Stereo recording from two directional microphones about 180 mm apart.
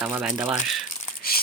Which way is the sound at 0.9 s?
55° left (ahead or behind).